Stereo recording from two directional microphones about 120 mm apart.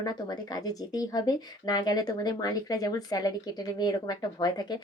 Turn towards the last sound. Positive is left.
turn(degrees=35)  # may be behind; listen again after turning